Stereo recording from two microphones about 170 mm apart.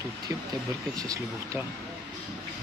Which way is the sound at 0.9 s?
20° right (ahead or behind).